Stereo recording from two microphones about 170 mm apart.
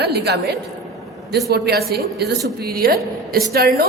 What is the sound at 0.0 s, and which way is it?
Speech, 75° right (ahead or behind).